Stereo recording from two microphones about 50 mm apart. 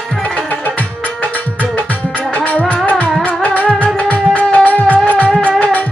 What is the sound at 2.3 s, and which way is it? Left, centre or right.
Music, left.